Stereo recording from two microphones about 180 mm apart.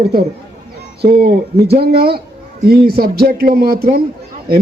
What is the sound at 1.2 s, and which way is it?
A man's voice, 60° right (ahead or behind).